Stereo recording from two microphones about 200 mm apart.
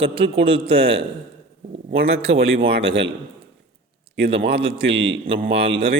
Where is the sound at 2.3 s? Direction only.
75° right (ahead or behind).